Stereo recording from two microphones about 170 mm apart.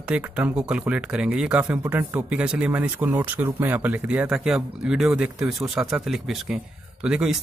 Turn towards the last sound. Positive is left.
turn(degrees=-5)  # may be behind; listen again after turning